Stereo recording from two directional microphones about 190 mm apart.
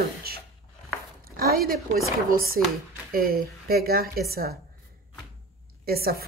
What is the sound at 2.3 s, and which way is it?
Speech, 50° right (ahead or behind).